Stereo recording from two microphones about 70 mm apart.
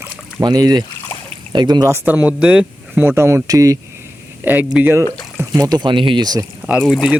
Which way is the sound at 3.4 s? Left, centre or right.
Right.